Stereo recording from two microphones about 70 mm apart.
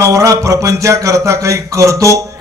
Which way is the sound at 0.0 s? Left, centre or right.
Right.